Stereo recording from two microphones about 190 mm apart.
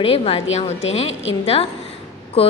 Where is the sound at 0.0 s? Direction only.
30° left (ahead or behind).